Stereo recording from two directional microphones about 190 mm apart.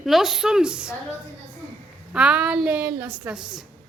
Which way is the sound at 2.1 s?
5° right (ahead or behind).